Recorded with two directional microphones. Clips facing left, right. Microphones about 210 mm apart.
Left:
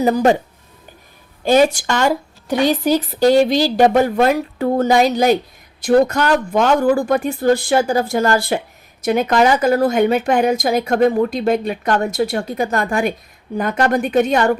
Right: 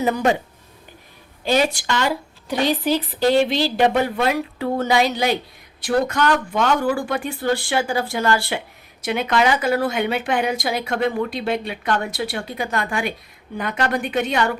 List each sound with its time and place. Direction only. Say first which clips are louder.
0.0 s speech: left 5 dB; 40° left (ahead or behind)
1.5 s a woman's voice: left 6 dB; 45° left (ahead or behind)